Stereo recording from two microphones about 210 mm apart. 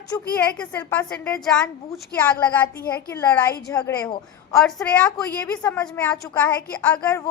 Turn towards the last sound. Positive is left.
turn(degrees=5)  # may be behind; listen again after turning